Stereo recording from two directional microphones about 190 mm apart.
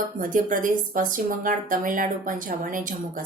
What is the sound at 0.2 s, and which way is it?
Speech, 45° right (ahead or behind).